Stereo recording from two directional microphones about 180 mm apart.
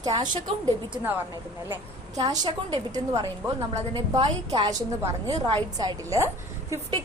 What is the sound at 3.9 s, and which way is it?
A woman's voice, 25° right (ahead or behind).